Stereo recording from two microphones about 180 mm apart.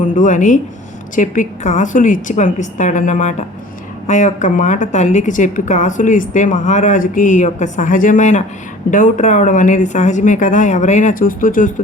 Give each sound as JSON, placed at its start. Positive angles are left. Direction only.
{"t": 0.0, "sound": "a woman's voice", "side_deg": 45}